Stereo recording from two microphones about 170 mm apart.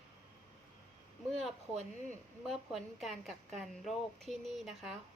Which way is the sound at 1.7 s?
40° right (ahead or behind).